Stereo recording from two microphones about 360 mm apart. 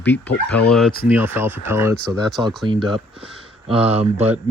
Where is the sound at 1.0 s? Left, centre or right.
Centre.